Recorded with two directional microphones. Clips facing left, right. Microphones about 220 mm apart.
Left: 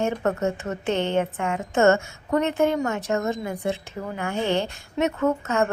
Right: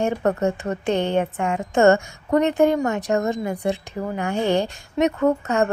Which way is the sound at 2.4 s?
15° right (ahead or behind).